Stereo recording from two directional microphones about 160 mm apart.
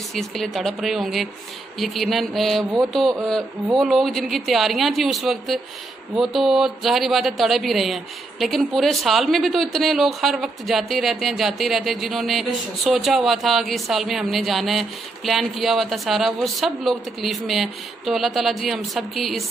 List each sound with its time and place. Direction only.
0.1 s speech: centre (ahead or behind)